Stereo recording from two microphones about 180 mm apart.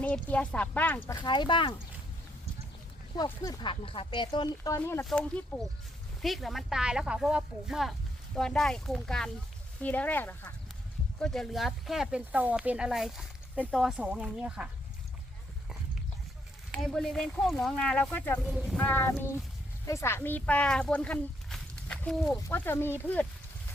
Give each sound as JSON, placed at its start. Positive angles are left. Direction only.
{"t": 0.0, "sound": "speech", "side_deg": 5}
{"t": 1.3, "sound": "speech", "side_deg": 25}
{"t": 3.4, "sound": "speech", "side_deg": 25}
{"t": 16.7, "sound": "speech", "side_deg": 5}
{"t": 18.4, "sound": "speech", "side_deg": -5}
{"t": 18.8, "sound": "speech", "side_deg": 10}